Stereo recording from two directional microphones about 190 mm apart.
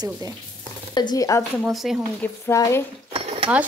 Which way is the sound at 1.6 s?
Centre (ahead or behind).